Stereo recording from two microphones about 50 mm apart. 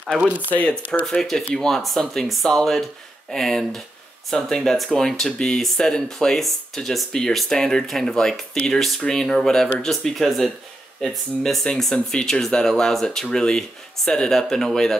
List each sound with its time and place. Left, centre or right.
0.2 s speech: right
0.5 s speech: left
1.5 s speech: centre
11.6 s speech: centre